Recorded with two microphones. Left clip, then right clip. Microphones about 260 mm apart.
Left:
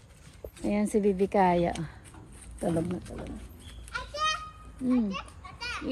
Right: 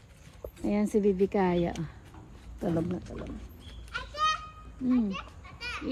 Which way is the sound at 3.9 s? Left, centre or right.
Centre.